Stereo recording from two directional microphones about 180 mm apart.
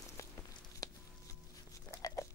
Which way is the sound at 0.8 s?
20° left (ahead or behind).